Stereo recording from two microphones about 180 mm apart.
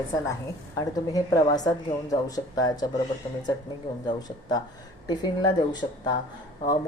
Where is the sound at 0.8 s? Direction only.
20° left (ahead or behind).